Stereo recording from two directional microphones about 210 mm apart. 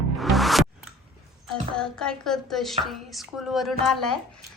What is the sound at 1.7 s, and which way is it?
Speech, 5° left (ahead or behind).